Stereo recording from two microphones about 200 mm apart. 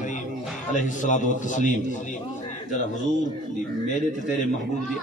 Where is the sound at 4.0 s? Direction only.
40° left (ahead or behind).